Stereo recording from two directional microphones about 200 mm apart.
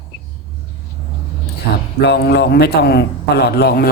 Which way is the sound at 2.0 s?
55° left (ahead or behind).